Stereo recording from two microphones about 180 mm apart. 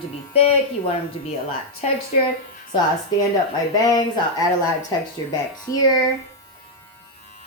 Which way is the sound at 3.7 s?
20° left (ahead or behind).